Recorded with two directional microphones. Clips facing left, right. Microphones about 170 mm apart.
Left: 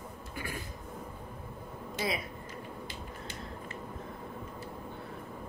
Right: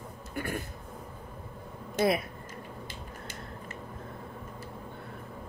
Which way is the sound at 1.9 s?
55° right (ahead or behind).